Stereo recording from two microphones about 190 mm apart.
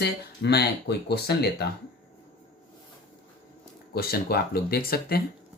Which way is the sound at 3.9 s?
55° left (ahead or behind).